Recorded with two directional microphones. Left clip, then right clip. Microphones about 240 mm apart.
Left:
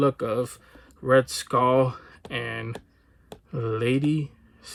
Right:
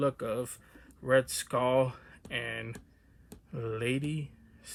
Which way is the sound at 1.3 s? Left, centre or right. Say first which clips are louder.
Left 7 dB; centre.